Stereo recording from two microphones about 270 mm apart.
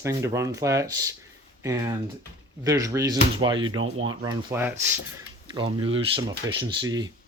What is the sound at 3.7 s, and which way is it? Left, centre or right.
Speech, right.